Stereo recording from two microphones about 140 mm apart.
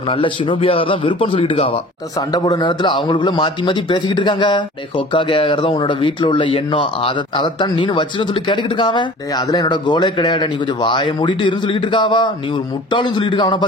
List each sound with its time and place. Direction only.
0.1 s a man's voice: 40° left (ahead or behind)
2.1 s a man's voice: 30° left (ahead or behind)